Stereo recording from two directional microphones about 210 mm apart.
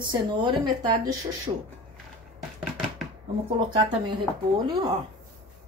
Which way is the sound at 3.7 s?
20° right (ahead or behind).